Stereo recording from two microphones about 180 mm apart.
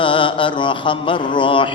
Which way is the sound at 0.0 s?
25° left (ahead or behind).